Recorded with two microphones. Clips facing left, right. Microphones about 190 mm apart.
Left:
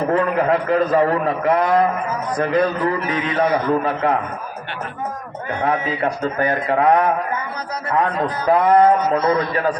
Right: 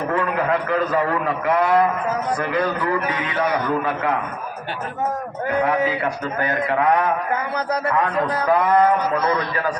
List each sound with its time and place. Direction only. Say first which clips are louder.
0.1 s a man's voice: left 3 dB; 35° left (ahead or behind)
6.4 s a man's voice: left 3 dB; 35° left (ahead or behind)
8.4 s a man's voice: left 4 dB; 30° left (ahead or behind)